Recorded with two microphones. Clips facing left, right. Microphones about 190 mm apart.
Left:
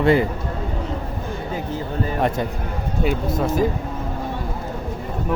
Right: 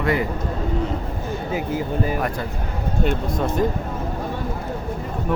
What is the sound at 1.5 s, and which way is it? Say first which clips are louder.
Speech: right 3 dB; 10° right (ahead or behind).